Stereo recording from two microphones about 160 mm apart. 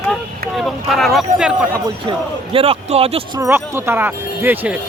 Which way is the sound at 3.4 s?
15° right (ahead or behind).